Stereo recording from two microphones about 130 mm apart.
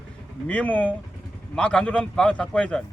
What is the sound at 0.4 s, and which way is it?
A man's voice, 10° left (ahead or behind).